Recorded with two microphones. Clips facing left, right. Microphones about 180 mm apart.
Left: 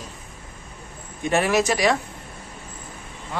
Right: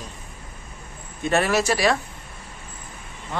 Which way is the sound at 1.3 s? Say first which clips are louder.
Left 1 dB; 15° left (ahead or behind).